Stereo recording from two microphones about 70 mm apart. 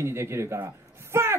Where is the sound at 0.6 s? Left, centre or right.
Right.